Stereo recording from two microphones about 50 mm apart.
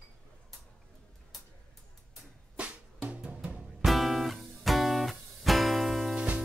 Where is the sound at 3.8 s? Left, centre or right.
Centre.